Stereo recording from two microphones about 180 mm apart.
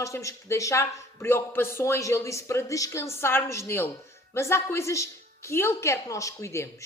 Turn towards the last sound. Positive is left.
turn(degrees=15)  # may be behind; listen again after turning